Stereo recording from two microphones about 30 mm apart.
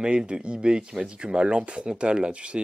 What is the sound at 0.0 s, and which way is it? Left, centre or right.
Speech, right.